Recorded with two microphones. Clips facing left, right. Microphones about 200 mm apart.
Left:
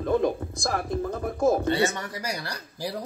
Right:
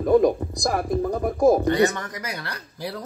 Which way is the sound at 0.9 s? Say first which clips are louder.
Right 5 dB; 20° right (ahead or behind).